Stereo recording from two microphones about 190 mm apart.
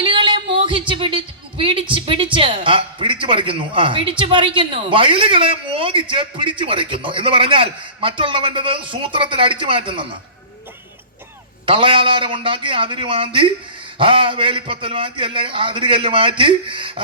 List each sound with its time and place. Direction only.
0.0 s speech: 25° right (ahead or behind)
11.6 s speech: 25° right (ahead or behind)